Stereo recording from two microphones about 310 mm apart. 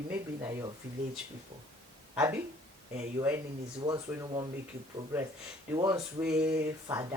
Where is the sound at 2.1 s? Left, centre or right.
Centre.